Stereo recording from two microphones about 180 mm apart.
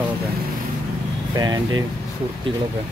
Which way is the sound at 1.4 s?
20° right (ahead or behind).